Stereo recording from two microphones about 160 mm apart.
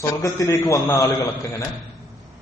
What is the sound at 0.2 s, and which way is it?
Speech, 20° left (ahead or behind).